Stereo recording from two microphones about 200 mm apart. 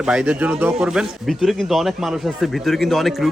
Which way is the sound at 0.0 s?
5° right (ahead or behind).